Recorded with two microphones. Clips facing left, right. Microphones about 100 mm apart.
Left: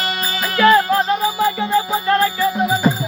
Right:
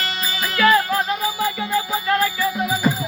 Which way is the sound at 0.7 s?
30° left (ahead or behind).